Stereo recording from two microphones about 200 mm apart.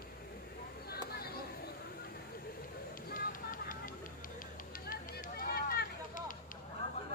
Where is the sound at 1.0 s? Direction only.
50° left (ahead or behind).